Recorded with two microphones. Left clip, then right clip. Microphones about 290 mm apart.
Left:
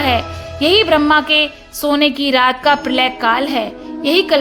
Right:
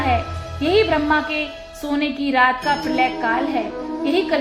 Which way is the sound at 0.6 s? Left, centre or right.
Left.